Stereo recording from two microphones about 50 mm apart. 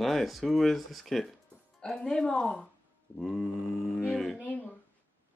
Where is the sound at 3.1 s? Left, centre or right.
Centre.